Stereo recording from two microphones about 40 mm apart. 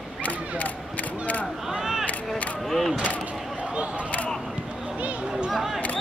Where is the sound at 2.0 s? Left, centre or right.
Left.